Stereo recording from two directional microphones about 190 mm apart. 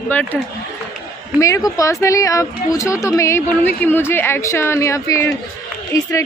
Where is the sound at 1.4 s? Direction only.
15° left (ahead or behind).